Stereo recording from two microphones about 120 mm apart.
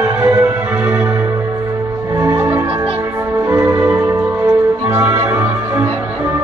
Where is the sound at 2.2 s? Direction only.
20° right (ahead or behind).